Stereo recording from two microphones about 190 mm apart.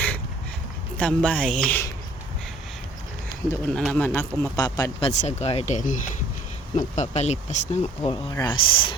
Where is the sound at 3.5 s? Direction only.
5° left (ahead or behind); by 8.1 s 35° left (ahead or behind).